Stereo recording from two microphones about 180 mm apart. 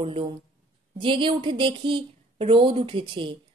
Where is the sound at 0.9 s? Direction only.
30° right (ahead or behind).